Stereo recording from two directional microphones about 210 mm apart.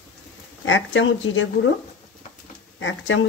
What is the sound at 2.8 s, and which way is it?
Speech, 65° left (ahead or behind).